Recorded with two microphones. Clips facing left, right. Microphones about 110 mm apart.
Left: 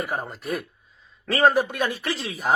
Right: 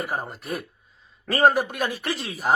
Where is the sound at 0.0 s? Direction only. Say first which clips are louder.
Left 1 dB; centre (ahead or behind).